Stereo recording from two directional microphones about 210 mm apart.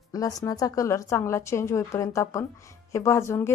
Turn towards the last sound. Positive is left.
turn(degrees=10)  # may be behind; listen again after turning